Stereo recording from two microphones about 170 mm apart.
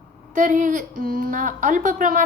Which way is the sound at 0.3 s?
50° right (ahead or behind).